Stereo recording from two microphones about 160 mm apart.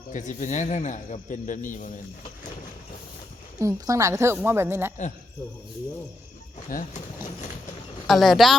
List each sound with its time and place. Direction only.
0.1 s speech: 50° left (ahead or behind)
3.6 s a woman's voice: 20° right (ahead or behind)
6.7 s speech: 60° left (ahead or behind)
8.0 s speech: centre (ahead or behind)